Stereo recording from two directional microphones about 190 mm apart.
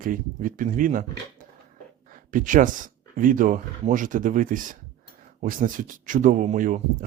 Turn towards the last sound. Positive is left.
turn(degrees=-45)  # may be behind; listen again after turning